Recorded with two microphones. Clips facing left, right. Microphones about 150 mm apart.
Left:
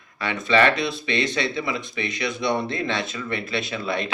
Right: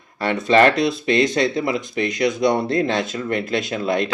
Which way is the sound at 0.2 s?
40° right (ahead or behind).